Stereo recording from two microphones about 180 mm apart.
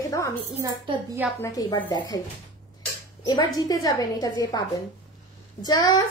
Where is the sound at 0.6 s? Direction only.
20° right (ahead or behind).